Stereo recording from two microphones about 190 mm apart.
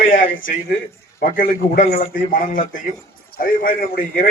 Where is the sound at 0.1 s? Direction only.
45° left (ahead or behind).